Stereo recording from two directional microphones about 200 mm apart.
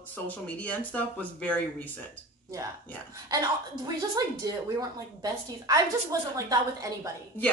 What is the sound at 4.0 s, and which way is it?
A woman's voice, 20° right (ahead or behind).